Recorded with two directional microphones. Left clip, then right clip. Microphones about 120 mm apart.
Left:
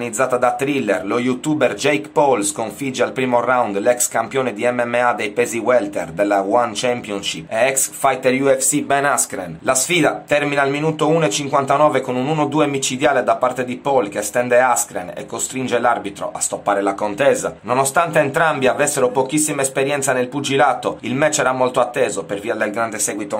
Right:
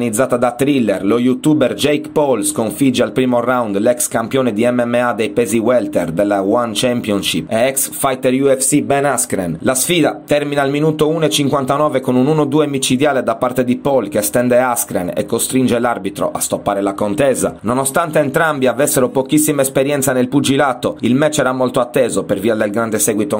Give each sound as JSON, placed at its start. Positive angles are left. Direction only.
{"t": 0.0, "sound": "speech", "side_deg": -30}
{"t": 3.3, "sound": "speech", "side_deg": -35}
{"t": 12.1, "sound": "speech", "side_deg": -20}
{"t": 12.5, "sound": "speech", "side_deg": -40}